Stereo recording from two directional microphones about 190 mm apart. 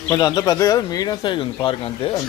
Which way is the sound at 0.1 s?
15° left (ahead or behind).